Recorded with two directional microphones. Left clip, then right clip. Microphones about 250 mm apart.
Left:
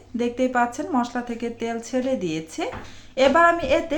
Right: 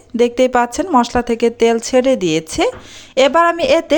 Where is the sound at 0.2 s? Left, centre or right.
Right.